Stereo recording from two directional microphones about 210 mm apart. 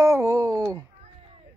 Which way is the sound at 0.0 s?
15° right (ahead or behind).